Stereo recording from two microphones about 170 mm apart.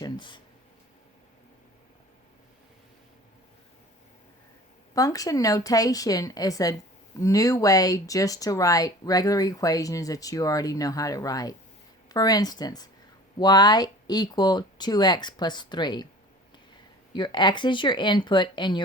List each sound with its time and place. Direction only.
0.0 s a sound: 25° left (ahead or behind)
4.9 s speech: 20° left (ahead or behind)
17.1 s speech: 25° left (ahead or behind)